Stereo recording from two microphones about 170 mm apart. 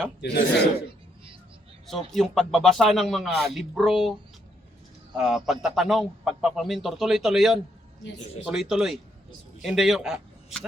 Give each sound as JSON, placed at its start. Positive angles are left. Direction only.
{"t": 0.2, "sound": "a man's voice", "side_deg": 85}
{"t": 1.9, "sound": "a man's voice", "side_deg": 0}